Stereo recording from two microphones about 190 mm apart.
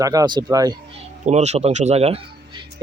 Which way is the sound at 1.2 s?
35° right (ahead or behind).